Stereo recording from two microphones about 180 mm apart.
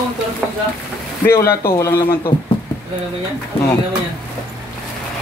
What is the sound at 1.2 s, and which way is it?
Speech, 15° left (ahead or behind).